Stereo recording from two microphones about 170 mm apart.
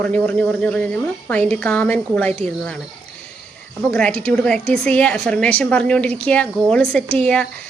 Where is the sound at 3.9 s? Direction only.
5° left (ahead or behind).